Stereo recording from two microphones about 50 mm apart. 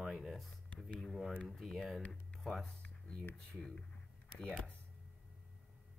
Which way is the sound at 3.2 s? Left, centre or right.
Left.